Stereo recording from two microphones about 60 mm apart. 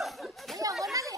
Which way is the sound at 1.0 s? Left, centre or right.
Right.